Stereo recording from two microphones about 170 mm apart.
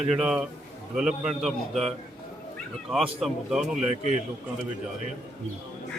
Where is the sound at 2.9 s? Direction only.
Centre (ahead or behind).